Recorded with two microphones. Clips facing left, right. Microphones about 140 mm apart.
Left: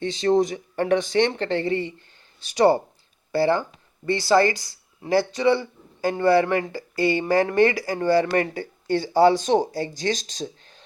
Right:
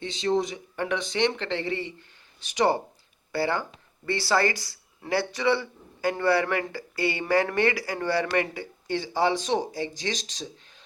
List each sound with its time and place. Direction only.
0.0 s speech: 45° left (ahead or behind)